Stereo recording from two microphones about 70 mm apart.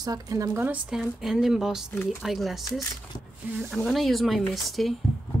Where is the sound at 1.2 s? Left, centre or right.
Centre.